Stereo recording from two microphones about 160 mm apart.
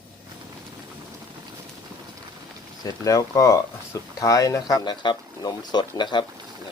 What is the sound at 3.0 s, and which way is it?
Speech, 20° left (ahead or behind).